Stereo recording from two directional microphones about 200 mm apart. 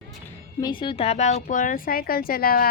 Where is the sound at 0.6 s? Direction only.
25° left (ahead or behind).